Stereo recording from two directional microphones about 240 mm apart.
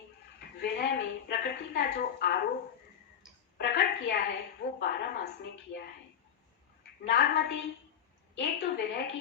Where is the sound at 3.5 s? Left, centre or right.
Left.